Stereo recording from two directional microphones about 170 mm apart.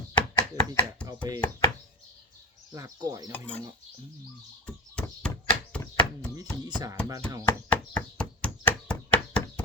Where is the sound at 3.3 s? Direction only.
10° left (ahead or behind).